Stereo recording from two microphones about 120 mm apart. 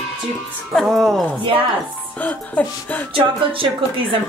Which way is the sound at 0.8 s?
Centre (ahead or behind).